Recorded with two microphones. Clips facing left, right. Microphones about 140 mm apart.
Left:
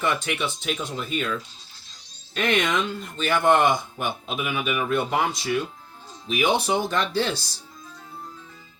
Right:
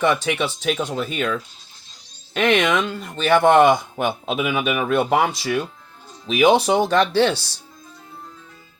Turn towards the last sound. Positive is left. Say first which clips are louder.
# right 7 dB
turn(degrees=-70)  # may be behind; listen again after turning